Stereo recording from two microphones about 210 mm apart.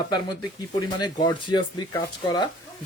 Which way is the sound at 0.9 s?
20° left (ahead or behind).